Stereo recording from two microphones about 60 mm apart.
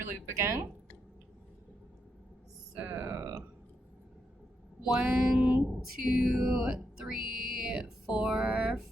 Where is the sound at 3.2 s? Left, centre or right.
Right.